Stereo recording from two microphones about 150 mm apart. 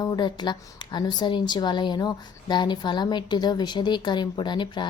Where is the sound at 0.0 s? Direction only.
30° left (ahead or behind).